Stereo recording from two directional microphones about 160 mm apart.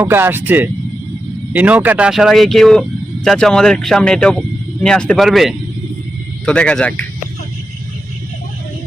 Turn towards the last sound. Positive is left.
turn(degrees=5)  # may be behind; listen again after turning